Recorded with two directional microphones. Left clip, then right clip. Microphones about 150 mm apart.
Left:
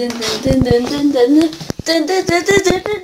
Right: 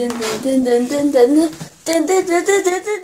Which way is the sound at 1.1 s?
Centre (ahead or behind).